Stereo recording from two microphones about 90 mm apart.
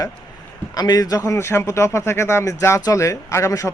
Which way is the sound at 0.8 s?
45° left (ahead or behind).